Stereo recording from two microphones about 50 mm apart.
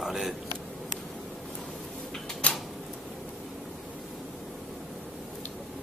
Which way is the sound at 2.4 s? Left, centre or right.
Left.